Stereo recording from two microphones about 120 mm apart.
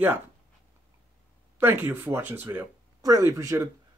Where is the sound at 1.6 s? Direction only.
15° right (ahead or behind).